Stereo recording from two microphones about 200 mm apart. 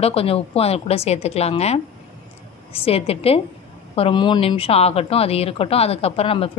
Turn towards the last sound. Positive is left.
turn(degrees=30)  # may be behind; listen again after turning